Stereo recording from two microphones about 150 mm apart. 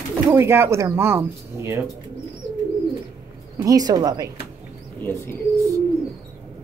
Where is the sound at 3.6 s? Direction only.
25° right (ahead or behind).